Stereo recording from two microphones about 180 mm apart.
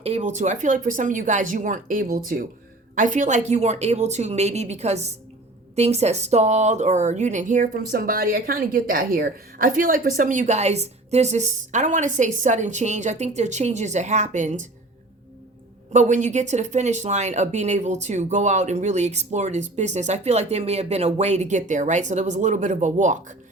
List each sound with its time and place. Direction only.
0.0 s speech: 40° right (ahead or behind)
15.9 s speech: 45° right (ahead or behind)